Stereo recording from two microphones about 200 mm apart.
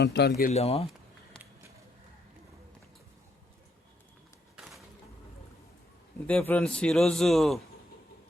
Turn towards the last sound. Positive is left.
turn(degrees=0)  # may be behind; listen again after turning